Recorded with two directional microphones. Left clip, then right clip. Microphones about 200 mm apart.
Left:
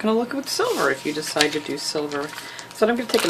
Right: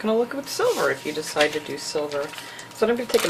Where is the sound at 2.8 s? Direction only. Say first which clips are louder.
Left 2 dB; 45° left (ahead or behind).